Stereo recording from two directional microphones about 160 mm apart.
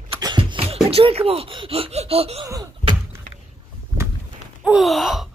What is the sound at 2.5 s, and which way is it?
Door, 20° right (ahead or behind).